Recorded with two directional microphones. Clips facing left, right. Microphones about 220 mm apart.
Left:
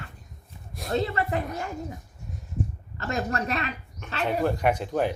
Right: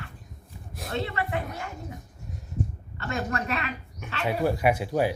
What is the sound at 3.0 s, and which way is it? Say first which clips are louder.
Speech: left 2 dB; 35° left (ahead or behind).